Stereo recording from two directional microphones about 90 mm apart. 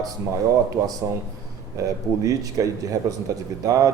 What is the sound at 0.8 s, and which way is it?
Speech, 40° right (ahead or behind).